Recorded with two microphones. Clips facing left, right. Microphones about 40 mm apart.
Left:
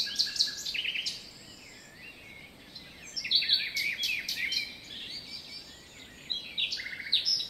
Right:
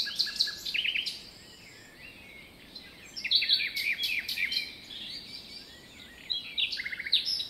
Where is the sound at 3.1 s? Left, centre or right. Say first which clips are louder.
Right 1 dB; centre.